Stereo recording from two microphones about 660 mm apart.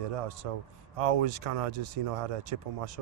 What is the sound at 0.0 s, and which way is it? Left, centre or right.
Speech, right.